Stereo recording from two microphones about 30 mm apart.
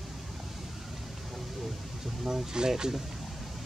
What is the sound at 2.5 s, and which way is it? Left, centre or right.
Speech, right.